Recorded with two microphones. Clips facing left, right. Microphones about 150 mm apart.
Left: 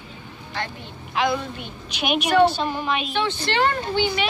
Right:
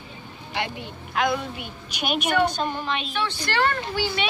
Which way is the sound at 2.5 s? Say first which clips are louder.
Left 2 dB; 10° left (ahead or behind).